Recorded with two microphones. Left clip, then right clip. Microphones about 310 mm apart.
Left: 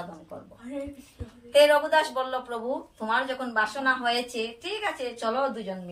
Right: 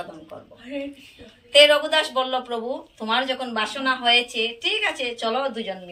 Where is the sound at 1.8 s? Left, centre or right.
Left.